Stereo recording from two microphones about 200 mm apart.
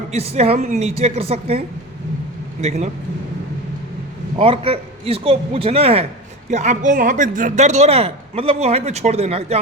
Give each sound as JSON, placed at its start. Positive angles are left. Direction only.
{"t": 0.1, "sound": "a man's voice", "side_deg": -30}
{"t": 4.4, "sound": "a man's voice", "side_deg": -30}